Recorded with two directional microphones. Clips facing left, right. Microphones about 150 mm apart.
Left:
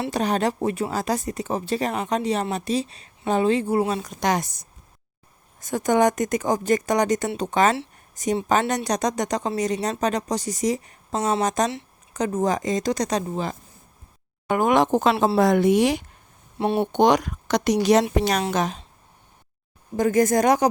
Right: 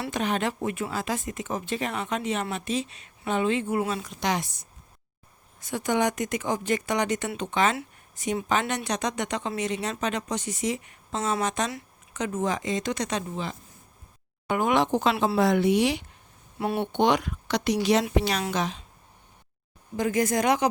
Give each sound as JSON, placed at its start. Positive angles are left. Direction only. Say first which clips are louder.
{"t": 0.0, "sound": "speech", "louder": "left 5 dB", "side_deg": 35}
{"t": 16.6, "sound": "speech", "louder": "left 5 dB", "side_deg": 25}
{"t": 16.9, "sound": "speech", "louder": "left 4 dB", "side_deg": 40}
{"t": 20.0, "sound": "speech", "louder": "left 6 dB", "side_deg": 45}